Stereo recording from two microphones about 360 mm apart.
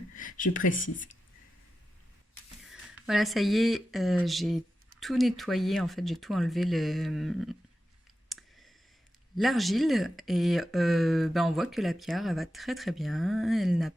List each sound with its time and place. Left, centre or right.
0.2 s speech: left
2.6 s speech: centre
8.3 s clicking: centre
9.3 s speech: centre